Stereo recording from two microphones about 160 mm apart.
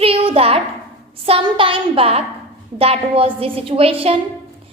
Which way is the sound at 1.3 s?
35° right (ahead or behind).